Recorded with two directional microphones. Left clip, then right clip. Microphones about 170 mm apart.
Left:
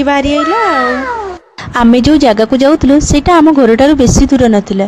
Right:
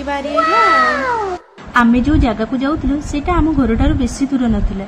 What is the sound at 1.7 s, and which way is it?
A woman's voice, 55° left (ahead or behind).